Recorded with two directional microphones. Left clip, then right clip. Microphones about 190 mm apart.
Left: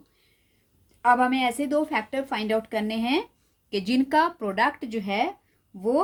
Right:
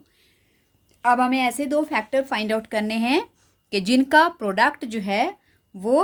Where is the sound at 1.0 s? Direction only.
30° right (ahead or behind).